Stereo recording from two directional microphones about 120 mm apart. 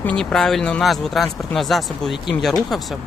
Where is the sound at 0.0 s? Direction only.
10° left (ahead or behind).